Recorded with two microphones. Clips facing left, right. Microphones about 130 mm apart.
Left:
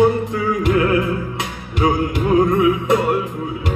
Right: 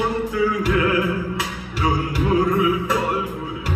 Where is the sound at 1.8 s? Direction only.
25° left (ahead or behind).